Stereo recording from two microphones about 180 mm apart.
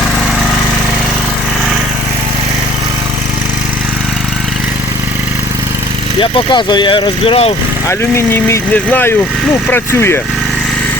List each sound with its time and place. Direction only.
6.1 s speech: 25° left (ahead or behind)
7.9 s speech: 15° left (ahead or behind)